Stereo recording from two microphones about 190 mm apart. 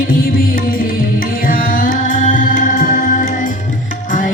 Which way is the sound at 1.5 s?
45° left (ahead or behind).